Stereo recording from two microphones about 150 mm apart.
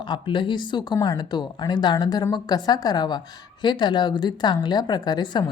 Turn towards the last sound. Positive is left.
turn(degrees=30)  # may be behind; listen again after turning